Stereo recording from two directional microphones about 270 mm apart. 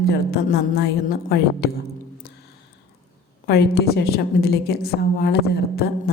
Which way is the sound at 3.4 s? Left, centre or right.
Left.